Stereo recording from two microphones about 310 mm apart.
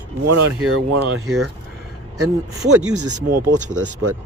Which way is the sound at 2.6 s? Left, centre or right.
Centre.